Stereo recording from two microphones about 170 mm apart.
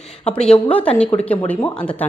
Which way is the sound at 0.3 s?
5° left (ahead or behind).